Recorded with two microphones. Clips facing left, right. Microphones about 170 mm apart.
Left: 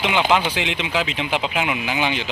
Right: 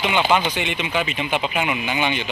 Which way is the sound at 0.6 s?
90° left.